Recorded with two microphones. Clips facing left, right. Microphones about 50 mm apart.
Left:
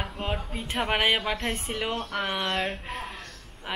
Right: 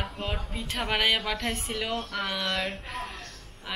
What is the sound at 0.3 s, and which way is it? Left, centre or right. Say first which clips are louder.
A woman's voice: left 2 dB; centre.